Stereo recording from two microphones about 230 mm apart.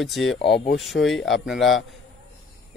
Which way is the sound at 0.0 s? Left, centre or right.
Centre.